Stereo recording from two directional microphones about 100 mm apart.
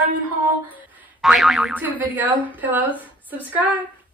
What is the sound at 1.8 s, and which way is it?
A woman's voice, 15° right (ahead or behind).